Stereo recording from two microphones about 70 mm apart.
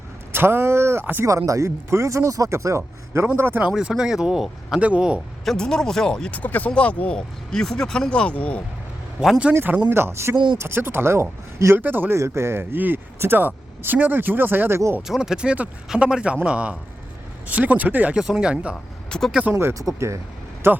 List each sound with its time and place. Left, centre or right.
0.3 s a man's voice: right
1.3 s a man's voice: right
3.8 s speech: centre
5.5 s speech: centre
6.4 s speech: left
9.6 s speech: right
9.9 s a man's voice: right
11.8 s speech: right
12.2 s speech: right
15.0 s speech: centre
18.2 s speech: centre
19.1 s vehicle: centre
19.9 s a man's voice: right